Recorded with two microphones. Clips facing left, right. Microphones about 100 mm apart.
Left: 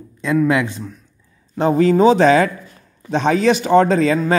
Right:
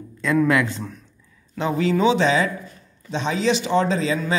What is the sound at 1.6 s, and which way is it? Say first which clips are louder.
Speech: left 7 dB; 45° left (ahead or behind).